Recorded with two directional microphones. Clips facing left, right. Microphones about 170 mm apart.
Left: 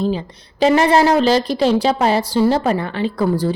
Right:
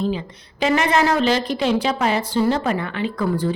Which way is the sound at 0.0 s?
35° left (ahead or behind).